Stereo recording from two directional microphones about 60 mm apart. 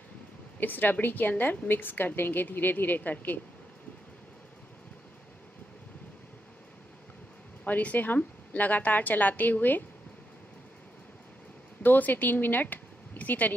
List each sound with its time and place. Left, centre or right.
0.6 s a woman's voice: left
7.6 s a woman's voice: left
11.8 s speech: left